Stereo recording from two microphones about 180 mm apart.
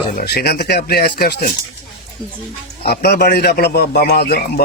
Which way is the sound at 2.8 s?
60° left (ahead or behind).